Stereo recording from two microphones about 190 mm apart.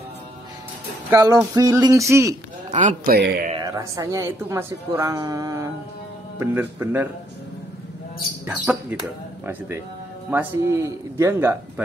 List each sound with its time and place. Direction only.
1.1 s a woman's voice: 15° right (ahead or behind)
2.7 s speech: 40° right (ahead or behind)
3.2 s speech: 60° right (ahead or behind)
3.5 s a woman's voice: 20° right (ahead or behind)
10.3 s a woman's voice: 15° right (ahead or behind)